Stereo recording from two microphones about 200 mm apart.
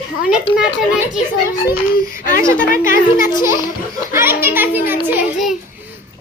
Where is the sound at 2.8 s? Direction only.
45° left (ahead or behind).